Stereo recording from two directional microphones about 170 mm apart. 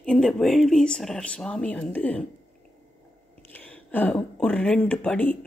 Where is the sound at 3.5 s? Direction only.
10° left (ahead or behind).